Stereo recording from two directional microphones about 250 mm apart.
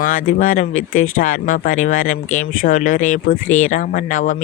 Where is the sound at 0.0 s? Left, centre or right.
Left.